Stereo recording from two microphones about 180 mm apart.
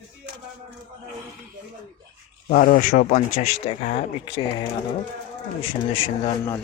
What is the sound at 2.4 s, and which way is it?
Speech, 55° left (ahead or behind).